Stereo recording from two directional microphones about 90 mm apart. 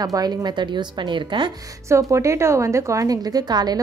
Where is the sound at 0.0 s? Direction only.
45° right (ahead or behind); by 1.5 s 60° right (ahead or behind).